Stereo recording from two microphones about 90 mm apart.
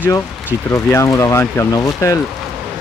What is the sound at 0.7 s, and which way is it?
Speech, 35° left (ahead or behind).